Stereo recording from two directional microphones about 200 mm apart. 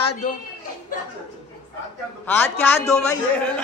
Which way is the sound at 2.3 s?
10° left (ahead or behind).